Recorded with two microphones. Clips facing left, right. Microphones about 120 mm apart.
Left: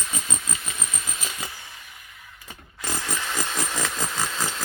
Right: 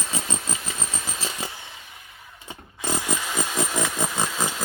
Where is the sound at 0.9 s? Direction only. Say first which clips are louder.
Right 3 dB; 30° right (ahead or behind).